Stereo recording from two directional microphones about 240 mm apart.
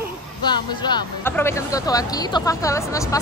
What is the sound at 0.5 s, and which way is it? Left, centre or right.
A woman's voice, centre.